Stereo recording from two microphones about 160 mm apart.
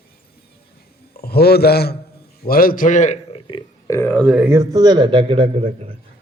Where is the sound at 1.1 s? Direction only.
80° left.